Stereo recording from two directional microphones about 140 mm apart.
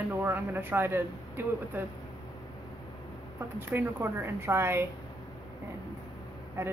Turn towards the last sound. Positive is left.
turn(degrees=-20)  # may be behind; listen again after turning